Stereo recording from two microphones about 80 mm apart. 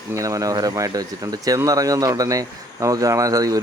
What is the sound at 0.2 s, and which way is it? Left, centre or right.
Speech, right.